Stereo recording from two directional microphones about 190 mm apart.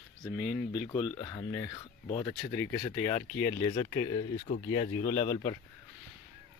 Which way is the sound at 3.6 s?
30° left (ahead or behind).